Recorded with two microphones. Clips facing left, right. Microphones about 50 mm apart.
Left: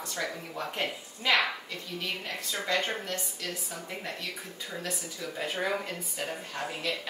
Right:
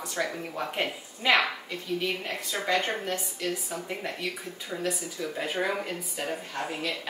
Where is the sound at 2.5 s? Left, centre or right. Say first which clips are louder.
Right 3 dB; right.